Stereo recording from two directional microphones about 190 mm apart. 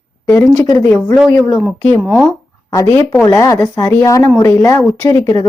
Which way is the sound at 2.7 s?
15° left (ahead or behind).